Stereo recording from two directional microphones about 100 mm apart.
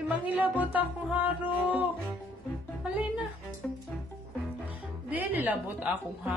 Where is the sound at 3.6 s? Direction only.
Centre (ahead or behind).